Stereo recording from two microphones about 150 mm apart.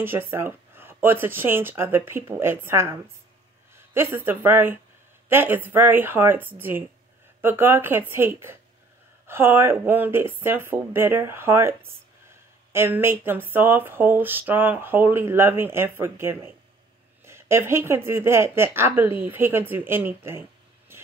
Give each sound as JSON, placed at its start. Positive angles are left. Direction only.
{"t": 0.0, "sound": "speech", "side_deg": -15}
{"t": 12.7, "sound": "speech", "side_deg": -15}
{"t": 20.9, "sound": "vehicle", "side_deg": -15}